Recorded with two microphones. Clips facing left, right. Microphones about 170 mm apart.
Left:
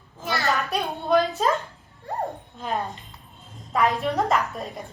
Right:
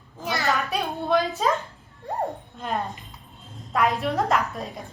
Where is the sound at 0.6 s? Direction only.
Centre (ahead or behind).